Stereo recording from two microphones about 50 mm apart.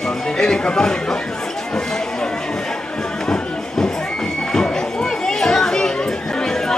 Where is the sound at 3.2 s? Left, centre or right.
Centre.